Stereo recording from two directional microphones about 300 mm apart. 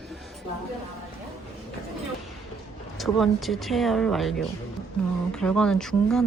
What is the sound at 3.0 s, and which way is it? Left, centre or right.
Speech, centre.